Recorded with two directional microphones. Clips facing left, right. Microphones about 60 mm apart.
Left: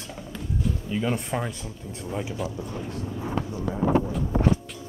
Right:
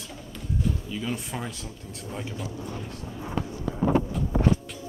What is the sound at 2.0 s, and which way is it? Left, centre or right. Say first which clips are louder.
Speech: left 5 dB; centre.